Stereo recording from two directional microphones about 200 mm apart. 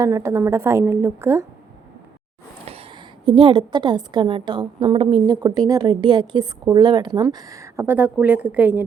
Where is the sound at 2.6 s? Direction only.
30° right (ahead or behind).